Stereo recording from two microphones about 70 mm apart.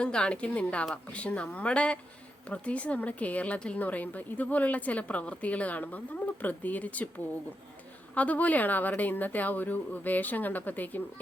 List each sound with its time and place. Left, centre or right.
0.0 s a woman's voice: centre
8.1 s a woman's voice: left